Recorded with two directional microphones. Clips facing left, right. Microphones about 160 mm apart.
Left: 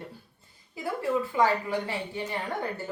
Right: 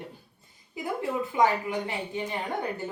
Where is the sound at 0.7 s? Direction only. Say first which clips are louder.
Left 2 dB; 20° right (ahead or behind).